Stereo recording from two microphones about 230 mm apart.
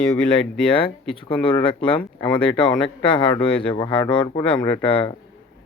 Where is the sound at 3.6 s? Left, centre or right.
Centre.